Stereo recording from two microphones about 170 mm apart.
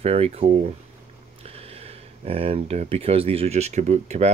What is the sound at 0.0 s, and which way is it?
Speech, 35° right (ahead or behind).